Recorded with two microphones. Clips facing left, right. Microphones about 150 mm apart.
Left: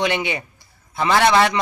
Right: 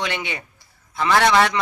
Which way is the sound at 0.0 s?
15° left (ahead or behind).